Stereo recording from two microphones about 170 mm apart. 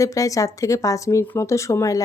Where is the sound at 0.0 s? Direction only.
20° left (ahead or behind).